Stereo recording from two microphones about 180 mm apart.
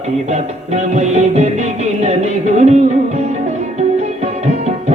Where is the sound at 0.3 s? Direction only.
40° right (ahead or behind).